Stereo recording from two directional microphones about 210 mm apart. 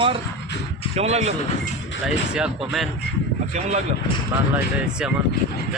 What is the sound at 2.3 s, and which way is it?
Speech, centre (ahead or behind).